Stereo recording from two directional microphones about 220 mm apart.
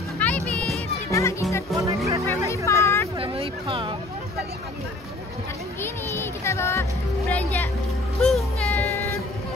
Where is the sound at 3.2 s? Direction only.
25° right (ahead or behind).